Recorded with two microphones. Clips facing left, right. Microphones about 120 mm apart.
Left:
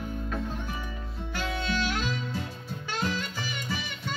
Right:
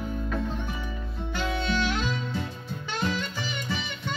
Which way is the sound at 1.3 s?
25° right (ahead or behind).